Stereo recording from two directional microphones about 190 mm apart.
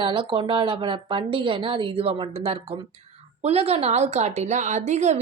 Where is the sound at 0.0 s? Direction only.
25° right (ahead or behind).